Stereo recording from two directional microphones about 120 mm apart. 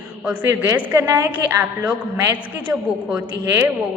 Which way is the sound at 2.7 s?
5° right (ahead or behind).